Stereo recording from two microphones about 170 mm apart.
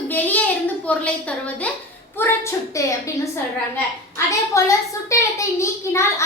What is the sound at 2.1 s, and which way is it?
Speech, 15° left (ahead or behind).